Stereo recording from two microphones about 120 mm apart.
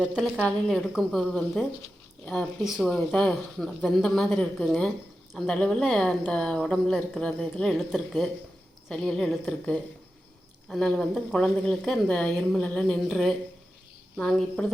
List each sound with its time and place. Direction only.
0.0 s speech: 5° right (ahead or behind)
0.3 s a woman's voice: 5° left (ahead or behind)